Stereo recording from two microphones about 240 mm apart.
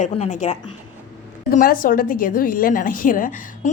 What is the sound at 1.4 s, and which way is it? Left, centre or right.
A woman's voice, left.